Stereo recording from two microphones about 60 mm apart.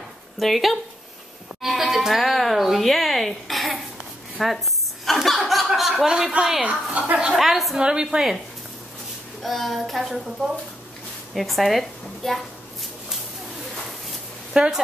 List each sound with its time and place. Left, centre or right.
0.4 s speech: centre
1.6 s music: centre
5.0 s chuckle: centre
6.3 s a woman's voice: centre
6.6 s a woman's voice: right
7.3 s speech: centre
7.8 s a woman's voice: centre
9.4 s a woman's voice: centre
14.5 s a woman's voice: centre